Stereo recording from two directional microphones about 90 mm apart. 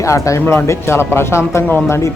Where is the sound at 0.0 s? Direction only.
35° left (ahead or behind).